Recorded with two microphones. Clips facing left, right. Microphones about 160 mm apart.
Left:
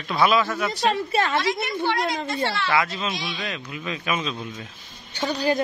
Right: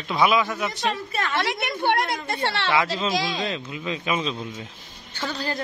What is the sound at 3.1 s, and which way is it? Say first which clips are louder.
Speech: right 6 dB; 90° right.